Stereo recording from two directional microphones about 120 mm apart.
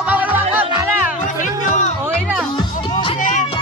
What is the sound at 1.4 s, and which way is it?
Music, 90° left.